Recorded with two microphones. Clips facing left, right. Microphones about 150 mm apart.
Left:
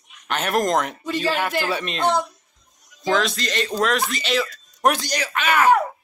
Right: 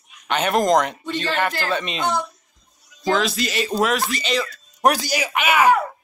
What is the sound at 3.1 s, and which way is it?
Speech, centre (ahead or behind).